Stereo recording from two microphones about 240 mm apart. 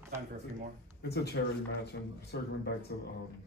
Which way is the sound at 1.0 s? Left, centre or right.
Left.